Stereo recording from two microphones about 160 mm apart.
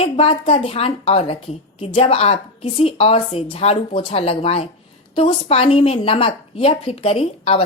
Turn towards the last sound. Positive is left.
turn(degrees=40)  # may be behind; listen again after turning